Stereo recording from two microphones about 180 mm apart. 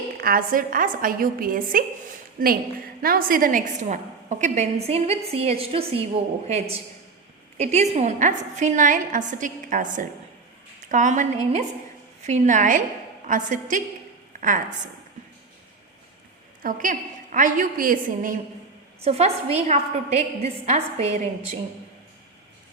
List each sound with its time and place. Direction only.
0.2 s a woman's voice: 50° right (ahead or behind)
14.3 s a sound: 50° right (ahead or behind)
16.6 s a woman's voice: 45° right (ahead or behind)
19.0 s a woman's voice: 35° right (ahead or behind)